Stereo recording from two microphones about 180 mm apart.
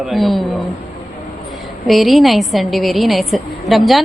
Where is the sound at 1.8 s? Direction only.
Centre (ahead or behind).